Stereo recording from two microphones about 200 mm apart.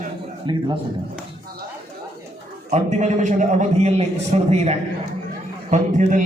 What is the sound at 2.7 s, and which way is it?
A man's voice, 35° right (ahead or behind).